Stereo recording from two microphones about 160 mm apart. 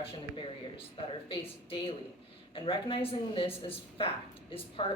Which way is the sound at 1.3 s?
35° left (ahead or behind).